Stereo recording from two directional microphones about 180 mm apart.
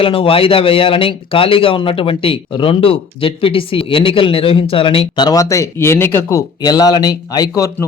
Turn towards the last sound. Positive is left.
turn(degrees=20)  # may be behind; listen again after turning